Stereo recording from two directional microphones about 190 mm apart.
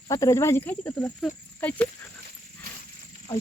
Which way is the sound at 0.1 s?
15° left (ahead or behind).